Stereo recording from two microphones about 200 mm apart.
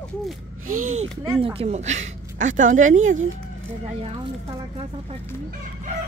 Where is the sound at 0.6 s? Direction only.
90° right.